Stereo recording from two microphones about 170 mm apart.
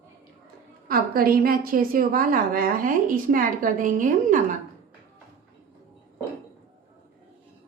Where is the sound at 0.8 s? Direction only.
60° right (ahead or behind).